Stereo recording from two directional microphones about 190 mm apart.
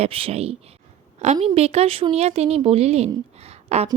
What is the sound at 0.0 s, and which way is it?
Speech, 30° right (ahead or behind).